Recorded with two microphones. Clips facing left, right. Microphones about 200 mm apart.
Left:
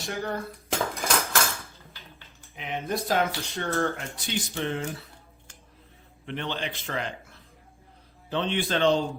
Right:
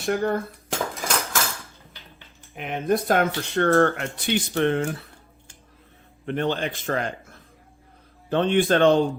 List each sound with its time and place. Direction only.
0.0 s speech: 55° right (ahead or behind)
0.7 s cutlery: centre (ahead or behind)
2.6 s speech: 50° right (ahead or behind)
6.2 s a man's voice: 45° right (ahead or behind)